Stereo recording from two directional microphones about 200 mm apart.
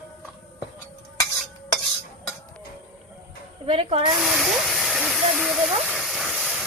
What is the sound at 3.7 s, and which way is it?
Snake, 30° right (ahead or behind).